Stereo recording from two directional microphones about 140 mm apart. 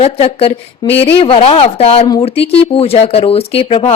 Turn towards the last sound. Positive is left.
turn(degrees=45)  # may be behind; listen again after turning